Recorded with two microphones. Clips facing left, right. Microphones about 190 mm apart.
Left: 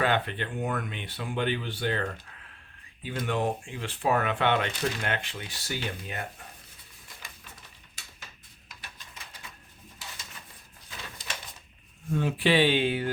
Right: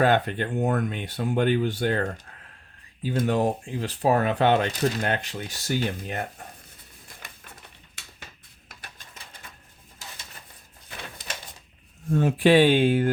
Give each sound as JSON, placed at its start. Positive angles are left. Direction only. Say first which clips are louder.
{"t": 0.0, "sound": "speech", "louder": "right 6 dB", "side_deg": -45}
{"t": 10.8, "sound": "a sound", "louder": "right 3 dB", "side_deg": -60}
{"t": 12.1, "sound": "speech", "louder": "right 6 dB", "side_deg": -45}